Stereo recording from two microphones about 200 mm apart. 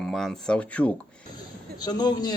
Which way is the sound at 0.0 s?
Centre (ahead or behind).